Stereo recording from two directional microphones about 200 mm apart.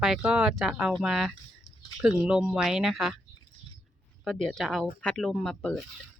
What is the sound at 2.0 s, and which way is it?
Speech, 5° right (ahead or behind).